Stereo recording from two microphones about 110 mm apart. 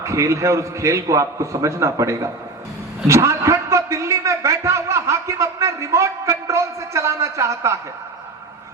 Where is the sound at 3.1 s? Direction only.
25° right (ahead or behind).